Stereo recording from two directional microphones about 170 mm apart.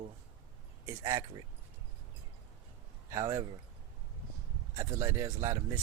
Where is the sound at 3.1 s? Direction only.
20° right (ahead or behind).